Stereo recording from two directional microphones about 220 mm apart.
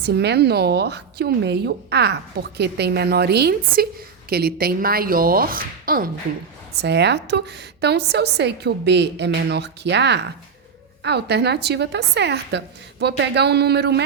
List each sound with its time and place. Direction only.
0.0 s speech: 50° right (ahead or behind)